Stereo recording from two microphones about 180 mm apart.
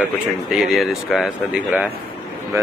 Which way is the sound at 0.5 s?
Centre (ahead or behind).